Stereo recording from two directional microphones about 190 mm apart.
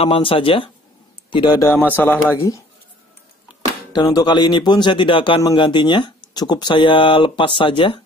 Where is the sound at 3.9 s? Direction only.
20° left (ahead or behind).